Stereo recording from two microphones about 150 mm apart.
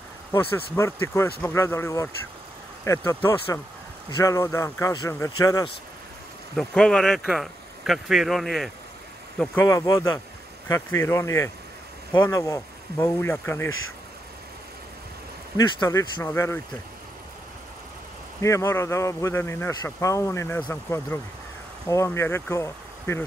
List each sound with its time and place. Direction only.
0.7 s speech: 20° left (ahead or behind)
6.5 s speech: 5° left (ahead or behind)
9.7 s speech: 20° left (ahead or behind)
15.5 s speech: 25° left (ahead or behind)
18.4 s speech: 20° left (ahead or behind)